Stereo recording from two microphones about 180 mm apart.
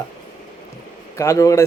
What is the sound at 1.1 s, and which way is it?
Speech, 15° left (ahead or behind).